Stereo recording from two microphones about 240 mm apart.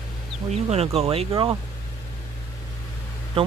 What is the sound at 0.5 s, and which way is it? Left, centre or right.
Speech, right.